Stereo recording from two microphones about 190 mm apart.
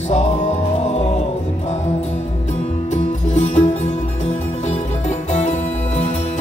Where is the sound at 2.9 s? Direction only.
35° left (ahead or behind).